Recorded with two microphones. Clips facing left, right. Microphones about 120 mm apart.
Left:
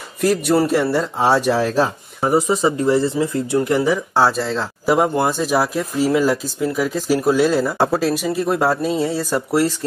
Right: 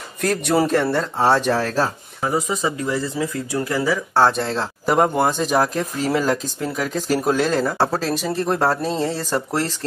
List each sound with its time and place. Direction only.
0.2 s speech: 5° left (ahead or behind)
2.2 s speech: 30° left (ahead or behind)
4.3 s speech: centre (ahead or behind)